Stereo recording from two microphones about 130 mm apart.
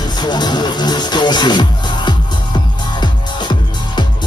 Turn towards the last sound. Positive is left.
turn(degrees=35)  # may be behind; listen again after turning